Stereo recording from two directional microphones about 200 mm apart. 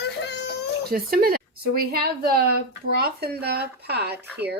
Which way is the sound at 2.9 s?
50° right (ahead or behind).